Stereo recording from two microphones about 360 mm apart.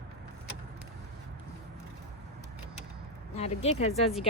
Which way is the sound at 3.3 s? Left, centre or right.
Centre.